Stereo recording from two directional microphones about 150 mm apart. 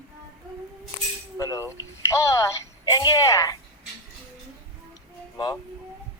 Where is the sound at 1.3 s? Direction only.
20° left (ahead or behind).